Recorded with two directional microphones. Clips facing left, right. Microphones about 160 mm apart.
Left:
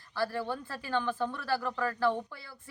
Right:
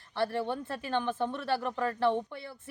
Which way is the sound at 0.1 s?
25° right (ahead or behind).